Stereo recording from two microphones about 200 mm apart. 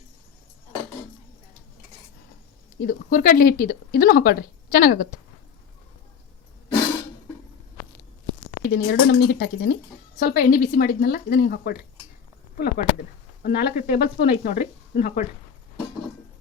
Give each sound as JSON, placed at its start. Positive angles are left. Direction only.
{"t": 2.8, "sound": "speech", "side_deg": 45}
{"t": 8.6, "sound": "speech", "side_deg": 60}